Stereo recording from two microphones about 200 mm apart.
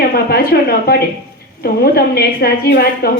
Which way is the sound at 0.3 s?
50° left (ahead or behind).